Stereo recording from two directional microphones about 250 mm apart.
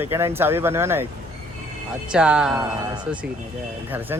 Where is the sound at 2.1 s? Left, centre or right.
Centre.